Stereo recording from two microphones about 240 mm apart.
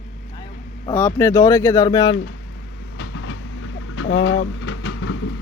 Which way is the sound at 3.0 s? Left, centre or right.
Left.